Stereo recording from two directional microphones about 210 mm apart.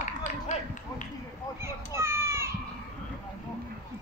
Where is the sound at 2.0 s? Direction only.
10° right (ahead or behind).